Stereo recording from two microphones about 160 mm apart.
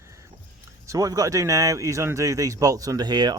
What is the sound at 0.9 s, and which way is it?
Speech, 20° right (ahead or behind).